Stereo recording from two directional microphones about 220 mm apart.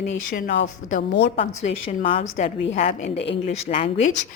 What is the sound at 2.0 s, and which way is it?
Speech, 25° left (ahead or behind).